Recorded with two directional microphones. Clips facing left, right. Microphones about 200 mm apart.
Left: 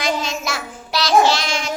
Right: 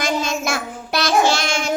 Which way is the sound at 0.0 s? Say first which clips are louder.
Right 1 dB; 50° right (ahead or behind).